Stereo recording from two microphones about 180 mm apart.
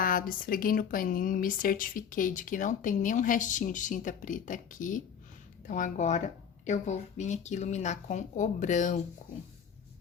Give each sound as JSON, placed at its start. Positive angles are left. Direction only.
{"t": 0.0, "sound": "speech", "side_deg": 50}